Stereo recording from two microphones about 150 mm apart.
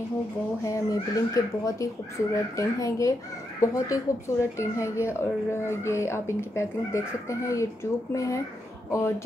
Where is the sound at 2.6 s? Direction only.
20° left (ahead or behind).